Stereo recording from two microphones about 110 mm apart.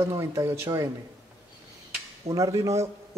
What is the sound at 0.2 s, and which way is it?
Speech, 25° right (ahead or behind).